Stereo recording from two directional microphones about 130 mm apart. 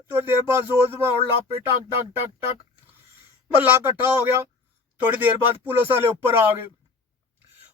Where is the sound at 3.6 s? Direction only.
15° right (ahead or behind).